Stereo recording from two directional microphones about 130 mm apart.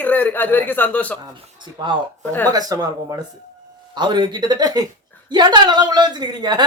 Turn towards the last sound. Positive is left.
turn(degrees=-35)  # may be behind; listen again after turning